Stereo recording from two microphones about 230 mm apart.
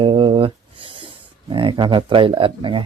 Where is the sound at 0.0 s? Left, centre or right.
Right.